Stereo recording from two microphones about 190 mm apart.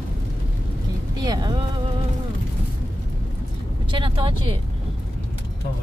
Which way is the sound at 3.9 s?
25° right (ahead or behind).